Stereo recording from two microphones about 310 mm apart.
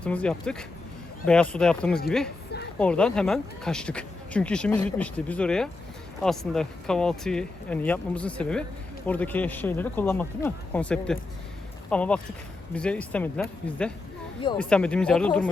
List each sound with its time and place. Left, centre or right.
0.0 s speech: centre